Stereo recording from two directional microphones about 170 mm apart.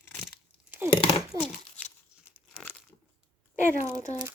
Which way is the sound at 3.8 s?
45° left (ahead or behind).